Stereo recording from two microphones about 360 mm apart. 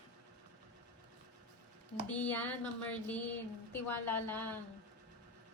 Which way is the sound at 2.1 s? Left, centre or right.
Centre.